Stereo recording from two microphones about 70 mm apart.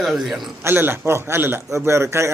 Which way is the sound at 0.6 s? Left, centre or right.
Right.